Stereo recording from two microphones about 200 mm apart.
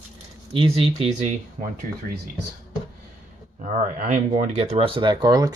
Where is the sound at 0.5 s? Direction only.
25° right (ahead or behind).